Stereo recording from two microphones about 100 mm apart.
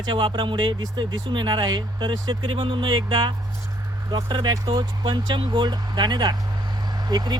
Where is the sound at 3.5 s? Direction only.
30° right (ahead or behind).